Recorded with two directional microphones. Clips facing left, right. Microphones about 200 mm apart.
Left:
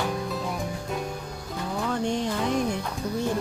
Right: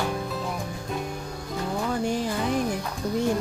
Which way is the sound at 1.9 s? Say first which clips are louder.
Left 1 dB; 5° right (ahead or behind).